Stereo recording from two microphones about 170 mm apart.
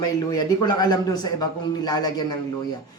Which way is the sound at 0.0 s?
25° left (ahead or behind).